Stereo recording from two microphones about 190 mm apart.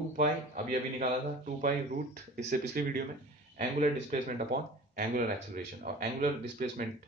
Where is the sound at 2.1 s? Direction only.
55° right (ahead or behind).